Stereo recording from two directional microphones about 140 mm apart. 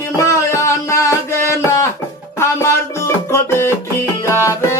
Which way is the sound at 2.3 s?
20° left (ahead or behind).